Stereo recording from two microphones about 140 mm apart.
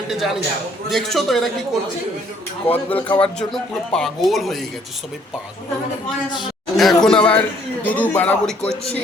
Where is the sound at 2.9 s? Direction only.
40° left (ahead or behind).